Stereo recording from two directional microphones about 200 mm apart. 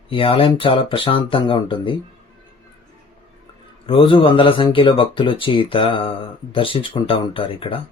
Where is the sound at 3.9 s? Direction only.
25° left (ahead or behind).